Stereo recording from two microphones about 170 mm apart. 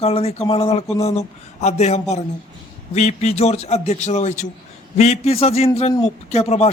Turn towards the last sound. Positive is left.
turn(degrees=40)  # may be behind; listen again after turning